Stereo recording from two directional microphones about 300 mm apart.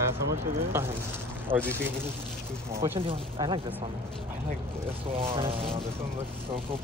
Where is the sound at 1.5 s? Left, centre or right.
Centre.